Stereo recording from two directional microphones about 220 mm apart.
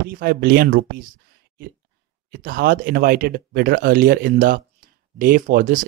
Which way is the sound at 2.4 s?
40° right (ahead or behind).